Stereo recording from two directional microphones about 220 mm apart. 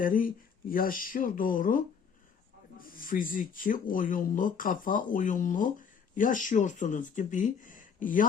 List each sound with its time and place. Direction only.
0.0 s speech: 40° left (ahead or behind)